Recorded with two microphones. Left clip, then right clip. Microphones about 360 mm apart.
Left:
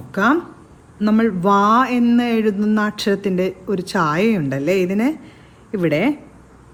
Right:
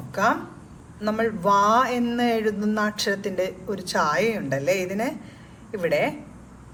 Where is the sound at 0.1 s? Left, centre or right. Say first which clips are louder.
Left 5 dB; left.